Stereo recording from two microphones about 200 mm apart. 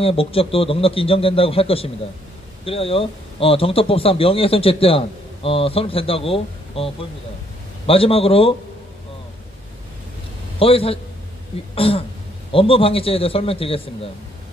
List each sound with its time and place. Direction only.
0.0 s speech: 30° left (ahead or behind)
10.6 s speech: 30° left (ahead or behind)